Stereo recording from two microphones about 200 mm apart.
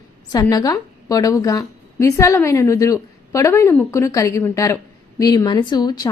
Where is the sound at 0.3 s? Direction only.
15° left (ahead or behind).